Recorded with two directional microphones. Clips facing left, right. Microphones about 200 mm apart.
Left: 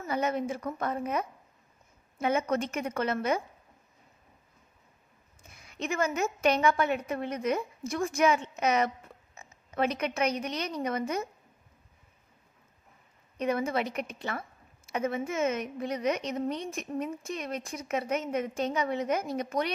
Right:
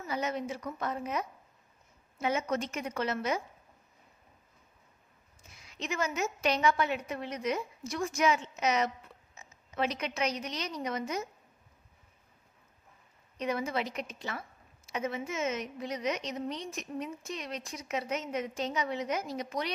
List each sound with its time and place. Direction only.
0.0 s a woman's voice: 55° left (ahead or behind)
5.4 s a woman's voice: 55° left (ahead or behind)
13.4 s a woman's voice: 50° left (ahead or behind)